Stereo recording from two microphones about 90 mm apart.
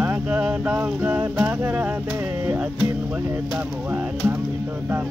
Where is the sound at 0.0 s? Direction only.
20° right (ahead or behind).